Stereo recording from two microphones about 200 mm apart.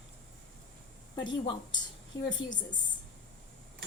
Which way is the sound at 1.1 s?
20° left (ahead or behind).